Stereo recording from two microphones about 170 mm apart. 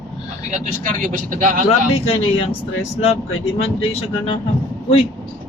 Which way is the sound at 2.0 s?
35° left (ahead or behind).